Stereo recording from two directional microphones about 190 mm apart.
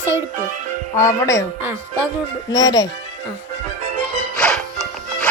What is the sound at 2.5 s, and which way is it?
Speech, 20° left (ahead or behind).